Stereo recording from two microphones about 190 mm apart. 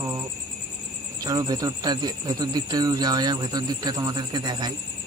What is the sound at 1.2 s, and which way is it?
Speech, 20° right (ahead or behind).